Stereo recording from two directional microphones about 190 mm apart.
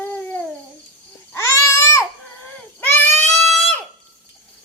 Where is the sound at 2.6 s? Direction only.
10° left (ahead or behind).